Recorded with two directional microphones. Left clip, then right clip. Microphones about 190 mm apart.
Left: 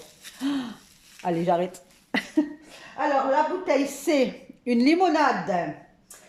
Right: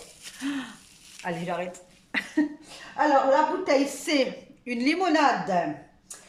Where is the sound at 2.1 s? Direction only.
30° left (ahead or behind).